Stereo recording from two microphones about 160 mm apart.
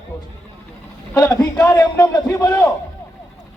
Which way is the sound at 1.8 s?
25° left (ahead or behind).